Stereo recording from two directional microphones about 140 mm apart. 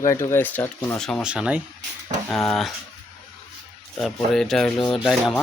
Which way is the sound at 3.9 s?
5° left (ahead or behind).